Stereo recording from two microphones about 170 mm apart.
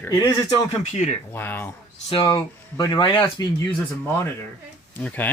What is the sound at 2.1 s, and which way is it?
Speech, 25° left (ahead or behind).